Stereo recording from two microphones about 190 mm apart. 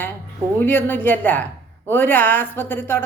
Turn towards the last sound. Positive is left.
turn(degrees=10)  # may be behind; listen again after turning